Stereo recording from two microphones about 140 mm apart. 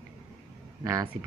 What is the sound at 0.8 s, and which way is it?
Speech, 20° right (ahead or behind).